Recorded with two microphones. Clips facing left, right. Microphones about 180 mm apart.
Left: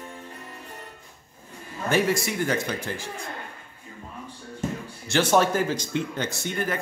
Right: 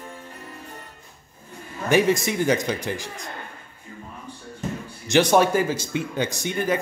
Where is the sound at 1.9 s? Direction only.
20° right (ahead or behind).